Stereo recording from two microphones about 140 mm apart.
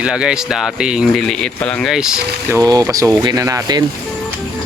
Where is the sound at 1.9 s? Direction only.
5° right (ahead or behind).